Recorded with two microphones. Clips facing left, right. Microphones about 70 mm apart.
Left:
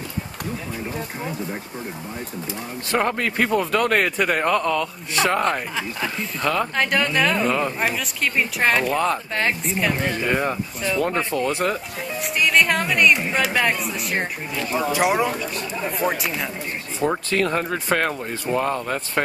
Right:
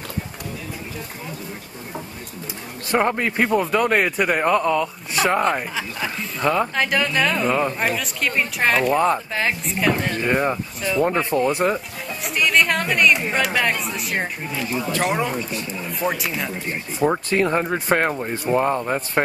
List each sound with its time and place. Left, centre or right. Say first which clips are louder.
2.9 s a man's voice: right 2 dB; centre
6.4 s a man's voice: right 3 dB; centre
6.7 s a man's voice: even; centre
12.2 s speech: even; centre
14.9 s speech: left 3 dB; centre
15.5 s speech: left 2 dB; left
16.1 s speech: even; centre
17.3 s a man's voice: right 2 dB; centre